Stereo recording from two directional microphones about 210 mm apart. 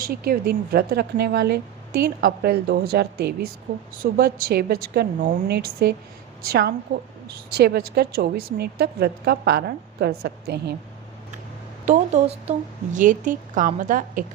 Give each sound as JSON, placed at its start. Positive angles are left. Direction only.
{"t": 0.0, "sound": "a woman's voice", "side_deg": -45}
{"t": 11.9, "sound": "a woman's voice", "side_deg": -30}